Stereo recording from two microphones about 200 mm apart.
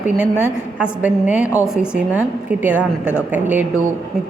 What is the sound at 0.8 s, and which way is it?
A woman's voice, 5° right (ahead or behind).